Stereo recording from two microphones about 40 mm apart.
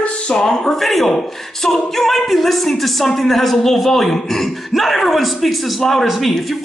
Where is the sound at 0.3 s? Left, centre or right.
Centre.